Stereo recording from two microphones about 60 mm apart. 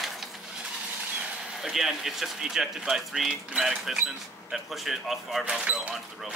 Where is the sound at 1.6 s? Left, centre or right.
Centre.